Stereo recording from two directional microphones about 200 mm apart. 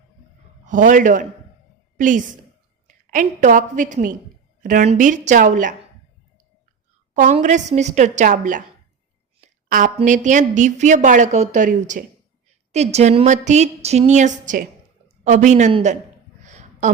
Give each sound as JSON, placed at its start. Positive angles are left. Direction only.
{"t": 0.6, "sound": "a man's voice", "side_deg": -40}
{"t": 7.1, "sound": "a woman's voice", "side_deg": -40}
{"t": 16.4, "sound": "a sound", "side_deg": -35}